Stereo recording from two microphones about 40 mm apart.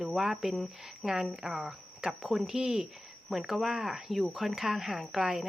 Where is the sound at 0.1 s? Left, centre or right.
Centre.